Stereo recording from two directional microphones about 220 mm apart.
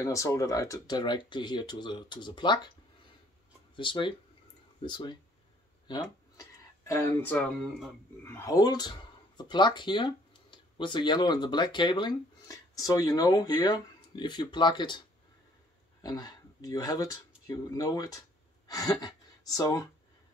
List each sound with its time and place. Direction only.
0.0 s speech: 15° left (ahead or behind)
3.7 s speech: 20° left (ahead or behind)
6.8 s speech: 15° left (ahead or behind)
16.0 s speech: 15° left (ahead or behind)